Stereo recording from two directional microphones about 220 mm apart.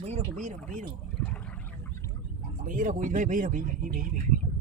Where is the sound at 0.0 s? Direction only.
30° right (ahead or behind).